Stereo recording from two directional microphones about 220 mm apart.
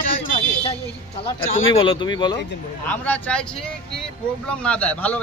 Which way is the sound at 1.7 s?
20° left (ahead or behind).